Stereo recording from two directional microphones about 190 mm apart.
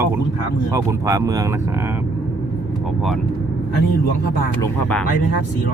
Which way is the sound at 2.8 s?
Centre (ahead or behind).